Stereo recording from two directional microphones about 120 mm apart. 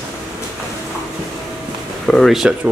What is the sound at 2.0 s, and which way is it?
Speech, centre (ahead or behind).